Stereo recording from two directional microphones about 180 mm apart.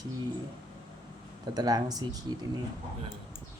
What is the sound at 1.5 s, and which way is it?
Speech, 20° right (ahead or behind).